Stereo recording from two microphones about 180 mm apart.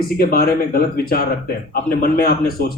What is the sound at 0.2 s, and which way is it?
A man's voice, 55° left (ahead or behind).